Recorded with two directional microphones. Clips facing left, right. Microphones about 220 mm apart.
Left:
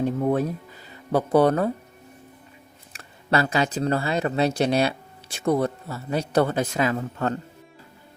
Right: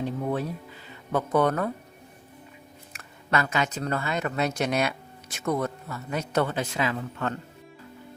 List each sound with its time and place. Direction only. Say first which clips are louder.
0.0 s music: left 6 dB; 45° left (ahead or behind)
1.1 s speech: left 5 dB; 35° left (ahead or behind)
2.9 s speech: left 4 dB; 30° left (ahead or behind)